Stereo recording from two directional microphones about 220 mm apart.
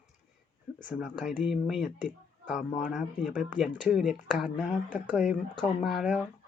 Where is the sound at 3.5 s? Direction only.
Centre (ahead or behind).